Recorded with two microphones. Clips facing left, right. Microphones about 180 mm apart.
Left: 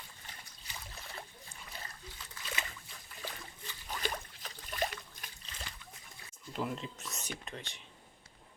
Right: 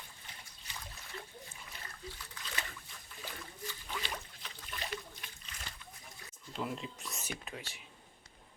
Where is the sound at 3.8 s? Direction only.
40° left (ahead or behind).